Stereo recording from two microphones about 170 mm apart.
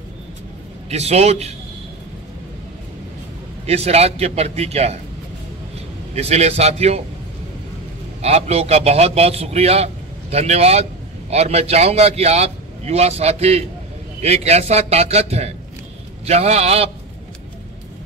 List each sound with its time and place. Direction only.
0.8 s a man's voice: 40° right (ahead or behind)
3.6 s a man's voice: 40° right (ahead or behind)
6.1 s a man's voice: 40° right (ahead or behind)
8.2 s a man's voice: 40° right (ahead or behind)